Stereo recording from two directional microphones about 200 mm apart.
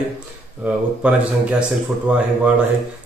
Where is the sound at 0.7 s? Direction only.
5° right (ahead or behind).